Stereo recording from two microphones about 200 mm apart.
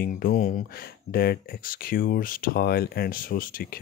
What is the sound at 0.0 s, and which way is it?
Speech, 45° left (ahead or behind).